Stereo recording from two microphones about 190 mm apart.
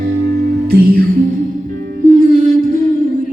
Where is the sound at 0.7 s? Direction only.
50° right (ahead or behind).